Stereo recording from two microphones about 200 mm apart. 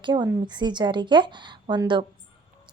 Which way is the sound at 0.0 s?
20° right (ahead or behind).